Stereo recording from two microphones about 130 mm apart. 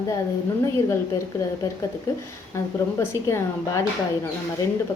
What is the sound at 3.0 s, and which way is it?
Speech, 25° left (ahead or behind).